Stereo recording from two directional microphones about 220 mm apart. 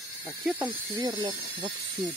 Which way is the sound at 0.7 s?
20° right (ahead or behind).